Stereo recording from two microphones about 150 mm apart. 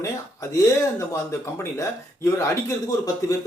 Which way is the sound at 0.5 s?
20° left (ahead or behind).